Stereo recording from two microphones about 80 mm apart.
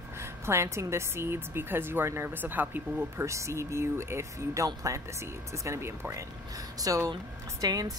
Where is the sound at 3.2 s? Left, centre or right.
Right.